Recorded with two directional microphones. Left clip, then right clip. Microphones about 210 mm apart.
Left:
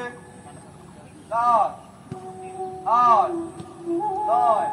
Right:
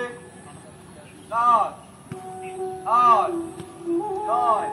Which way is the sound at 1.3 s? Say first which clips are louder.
Even; 50° left (ahead or behind).